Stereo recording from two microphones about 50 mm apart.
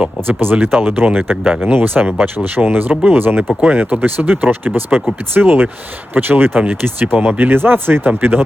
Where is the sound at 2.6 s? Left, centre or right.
Right.